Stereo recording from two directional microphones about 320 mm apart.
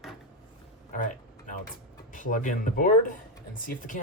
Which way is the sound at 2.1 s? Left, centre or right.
Left.